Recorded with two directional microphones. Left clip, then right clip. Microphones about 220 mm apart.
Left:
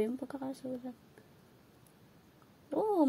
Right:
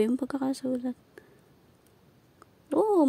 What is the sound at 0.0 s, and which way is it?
Speech, 35° right (ahead or behind).